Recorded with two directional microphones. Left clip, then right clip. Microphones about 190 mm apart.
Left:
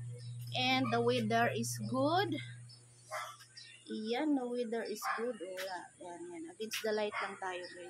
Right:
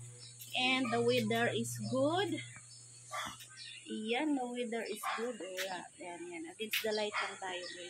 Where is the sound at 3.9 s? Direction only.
5° right (ahead or behind).